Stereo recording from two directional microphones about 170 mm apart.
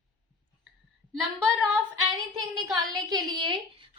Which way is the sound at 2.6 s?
20° right (ahead or behind).